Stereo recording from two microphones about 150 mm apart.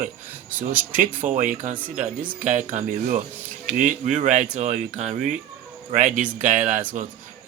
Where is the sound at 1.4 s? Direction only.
60° right (ahead or behind).